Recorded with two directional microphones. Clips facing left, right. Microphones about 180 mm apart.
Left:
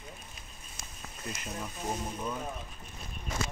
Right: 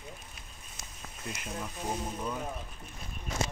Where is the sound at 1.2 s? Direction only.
Centre (ahead or behind).